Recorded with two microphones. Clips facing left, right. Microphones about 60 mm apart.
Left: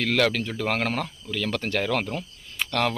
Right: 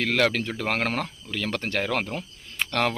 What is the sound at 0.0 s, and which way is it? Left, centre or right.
Speech, right.